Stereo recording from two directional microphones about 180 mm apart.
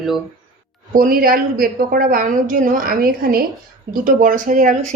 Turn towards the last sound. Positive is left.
turn(degrees=-45)  # may be behind; listen again after turning